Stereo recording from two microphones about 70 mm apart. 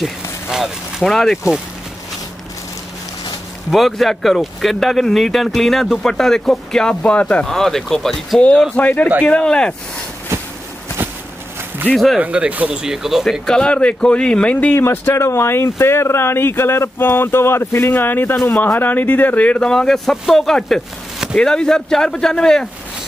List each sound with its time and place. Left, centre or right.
0.0 s speech: centre
3.7 s speech: centre
7.4 s speech: centre
8.4 s speech: centre
10.3 s a sound: right
11.9 s speech: centre
12.2 s speech: centre
12.8 s speech: centre
13.2 s speech: centre
14.7 s speech: left; by 22.7 s centre